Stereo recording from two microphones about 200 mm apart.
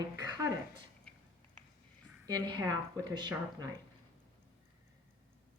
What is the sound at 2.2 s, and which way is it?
Speech, 20° right (ahead or behind).